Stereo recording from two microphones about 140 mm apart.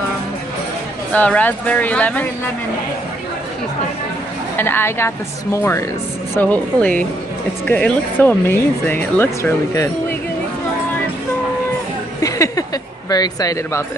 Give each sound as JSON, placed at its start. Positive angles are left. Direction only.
{"t": 1.1, "sound": "speech", "side_deg": 10}
{"t": 4.6, "sound": "speech", "side_deg": 15}
{"t": 12.2, "sound": "a sound", "side_deg": 25}
{"t": 13.1, "sound": "speech", "side_deg": 25}